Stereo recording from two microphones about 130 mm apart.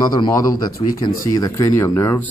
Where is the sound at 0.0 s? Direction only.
30° left (ahead or behind).